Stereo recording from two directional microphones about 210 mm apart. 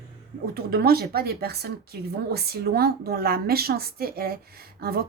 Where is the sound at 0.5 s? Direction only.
45° right (ahead or behind).